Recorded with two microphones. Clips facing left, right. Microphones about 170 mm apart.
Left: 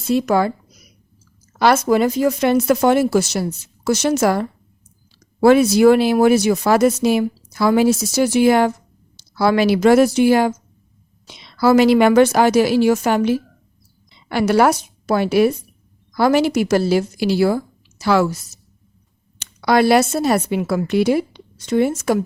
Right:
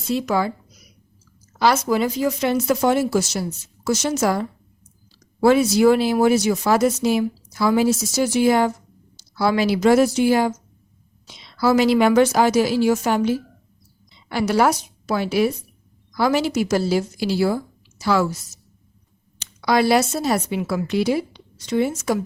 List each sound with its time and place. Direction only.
0.1 s speech: 55° left (ahead or behind)
1.5 s a woman's voice: 55° left (ahead or behind)